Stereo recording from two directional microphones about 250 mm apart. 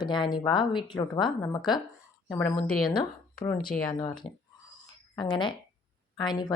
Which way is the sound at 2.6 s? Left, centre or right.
Left.